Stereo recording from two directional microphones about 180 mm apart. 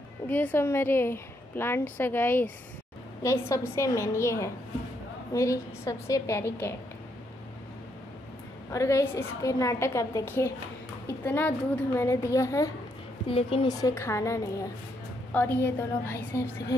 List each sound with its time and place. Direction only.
0.3 s a woman's voice: 10° left (ahead or behind)
8.7 s a woman's voice: 15° left (ahead or behind)
13.3 s a woman's voice: 30° left (ahead or behind)
13.7 s a woman's voice: 15° left (ahead or behind)